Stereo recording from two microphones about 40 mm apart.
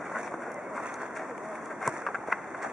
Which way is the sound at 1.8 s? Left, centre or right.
Centre.